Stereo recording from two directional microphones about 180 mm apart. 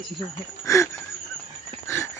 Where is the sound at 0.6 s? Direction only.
15° left (ahead or behind).